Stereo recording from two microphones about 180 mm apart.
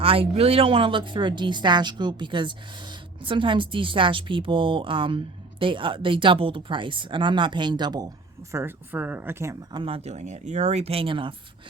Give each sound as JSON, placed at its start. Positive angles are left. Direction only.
{"t": 0.0, "sound": "a woman's voice", "side_deg": -30}
{"t": 8.5, "sound": "speech", "side_deg": -10}
{"t": 9.8, "sound": "speech", "side_deg": -35}